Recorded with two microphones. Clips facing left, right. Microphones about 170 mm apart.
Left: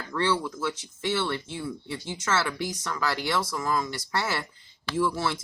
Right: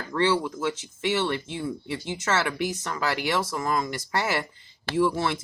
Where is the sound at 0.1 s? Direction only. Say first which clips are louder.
Right 3 dB; 20° right (ahead or behind).